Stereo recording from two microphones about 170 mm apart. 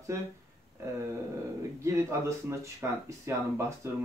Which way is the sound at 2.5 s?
10° right (ahead or behind).